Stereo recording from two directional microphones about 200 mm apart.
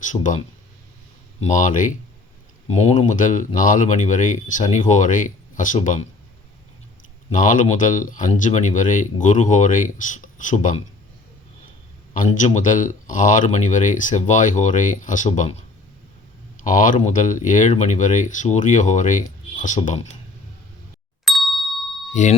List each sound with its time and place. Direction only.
0.0 s speech: 40° left (ahead or behind)
7.3 s speech: 40° left (ahead or behind)
12.1 s speech: 40° left (ahead or behind)
16.6 s speech: 40° left (ahead or behind)
21.2 s ding: centre (ahead or behind)
22.1 s speech: 35° left (ahead or behind)